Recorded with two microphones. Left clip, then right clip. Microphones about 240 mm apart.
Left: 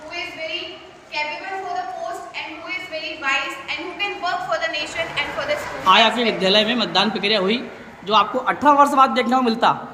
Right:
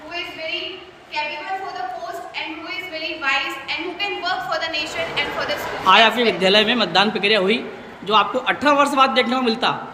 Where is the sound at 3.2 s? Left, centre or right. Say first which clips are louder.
Right 1 dB; centre.